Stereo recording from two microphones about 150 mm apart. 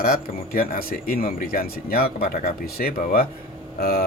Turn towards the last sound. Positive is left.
turn(degrees=85)